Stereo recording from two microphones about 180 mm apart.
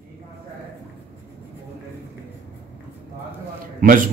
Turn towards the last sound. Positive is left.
turn(degrees=-50)  # may be behind; listen again after turning